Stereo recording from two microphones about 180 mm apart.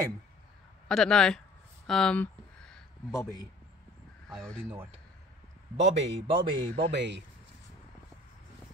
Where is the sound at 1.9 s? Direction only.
5° left (ahead or behind).